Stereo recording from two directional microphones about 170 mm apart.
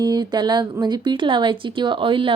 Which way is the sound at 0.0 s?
25° right (ahead or behind).